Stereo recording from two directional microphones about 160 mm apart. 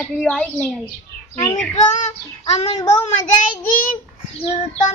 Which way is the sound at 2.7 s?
25° left (ahead or behind).